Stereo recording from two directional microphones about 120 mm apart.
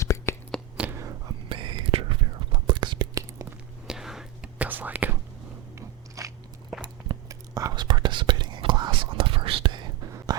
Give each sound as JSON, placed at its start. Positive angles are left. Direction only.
{"t": 0.0, "sound": "a sound", "side_deg": 25}
{"t": 0.8, "sound": "whispering", "side_deg": -20}
{"t": 1.5, "sound": "whispering", "side_deg": -45}
{"t": 3.8, "sound": "whispering", "side_deg": -5}
{"t": 5.7, "sound": "biting", "side_deg": -25}
{"t": 6.8, "sound": "whispering", "side_deg": -35}
{"t": 10.1, "sound": "a sound", "side_deg": -25}